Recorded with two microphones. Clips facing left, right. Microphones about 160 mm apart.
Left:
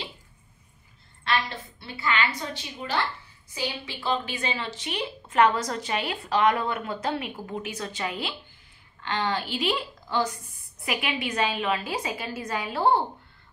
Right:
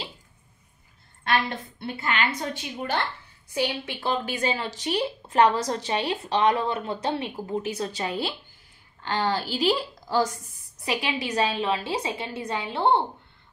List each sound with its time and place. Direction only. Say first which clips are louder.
1.2 s a sound: right 3 dB; 50° right (ahead or behind)
3.5 s a woman's voice: right 5 dB; 60° right (ahead or behind); by 10.4 s 40° right (ahead or behind)
10.9 s a woman's voice: right 2 dB; 30° right (ahead or behind)